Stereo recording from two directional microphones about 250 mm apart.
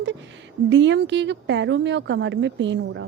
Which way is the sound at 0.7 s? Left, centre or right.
Right.